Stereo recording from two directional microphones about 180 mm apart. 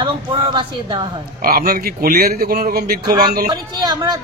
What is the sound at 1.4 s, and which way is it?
A man's voice, 55° right (ahead or behind).